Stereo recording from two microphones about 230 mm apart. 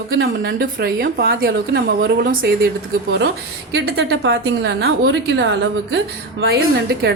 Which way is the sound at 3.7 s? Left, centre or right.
Right.